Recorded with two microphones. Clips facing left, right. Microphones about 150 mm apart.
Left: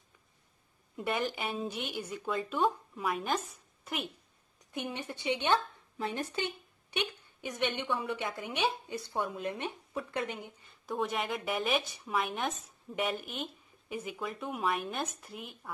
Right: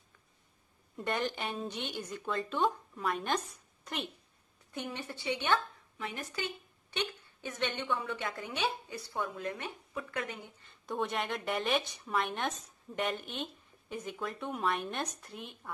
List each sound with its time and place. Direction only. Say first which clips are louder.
0.9 s a woman's voice: left 1 dB; 5° left (ahead or behind)
4.7 s a woman's voice: left 2 dB; 20° left (ahead or behind)
5.9 s speech: left 5 dB; 30° left (ahead or behind)
6.9 s a woman's voice: left 1 dB; 15° left (ahead or behind)
10.7 s a woman's voice: left 1 dB; centre (ahead or behind)